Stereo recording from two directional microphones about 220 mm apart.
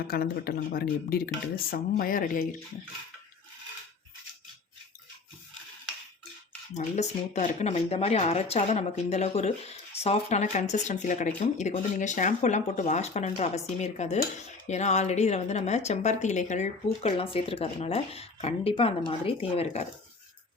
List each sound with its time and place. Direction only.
0.1 s speech: 45° left (ahead or behind)
6.7 s a woman's voice: 30° left (ahead or behind)